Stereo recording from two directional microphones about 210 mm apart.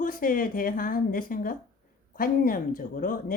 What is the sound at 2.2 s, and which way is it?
Speech, 45° left (ahead or behind).